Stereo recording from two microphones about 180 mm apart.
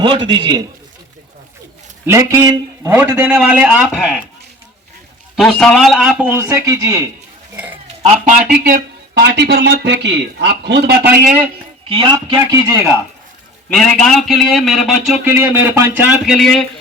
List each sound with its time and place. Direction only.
0.3 s a man's voice: 25° right (ahead or behind)
2.0 s a man's voice: 15° right (ahead or behind)
5.4 s a man's voice: 5° left (ahead or behind)
6.2 s speech: 15° right (ahead or behind)
8.0 s a man's voice: 35° right (ahead or behind)
8.4 s speech: 60° right (ahead or behind)
11.9 s a man's voice: 25° right (ahead or behind)
13.7 s a man's voice: 5° left (ahead or behind)
15.2 s speech: 10° right (ahead or behind)
16.2 s a man's voice: centre (ahead or behind)